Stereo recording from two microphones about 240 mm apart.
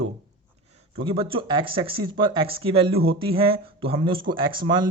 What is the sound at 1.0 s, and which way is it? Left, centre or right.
Speech, right.